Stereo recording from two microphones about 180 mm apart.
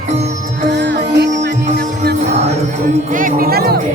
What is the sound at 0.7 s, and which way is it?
Music, 70° right (ahead or behind).